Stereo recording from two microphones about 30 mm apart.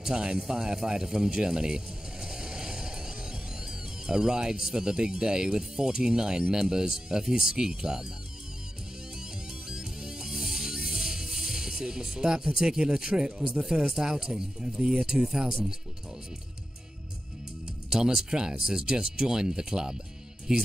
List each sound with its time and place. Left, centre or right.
0.0 s speech: right
2.2 s music: right
6.5 s speech: right
9.7 s music: right
11.8 s speech: centre
18.3 s speech: right